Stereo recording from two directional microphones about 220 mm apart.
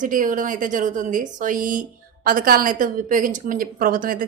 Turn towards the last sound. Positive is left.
turn(degrees=-40)  # may be behind; listen again after turning